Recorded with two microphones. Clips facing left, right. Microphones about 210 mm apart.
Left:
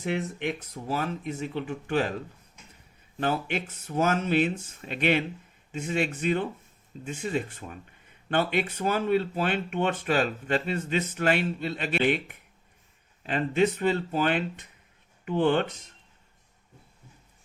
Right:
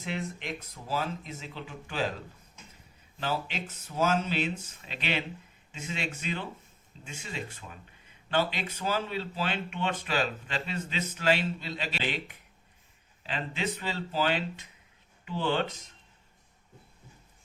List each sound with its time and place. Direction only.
0.0 s speech: 65° left (ahead or behind)
3.2 s speech: 55° left (ahead or behind)